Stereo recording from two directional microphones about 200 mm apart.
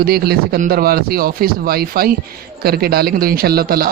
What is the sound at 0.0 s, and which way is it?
Speech, 50° right (ahead or behind).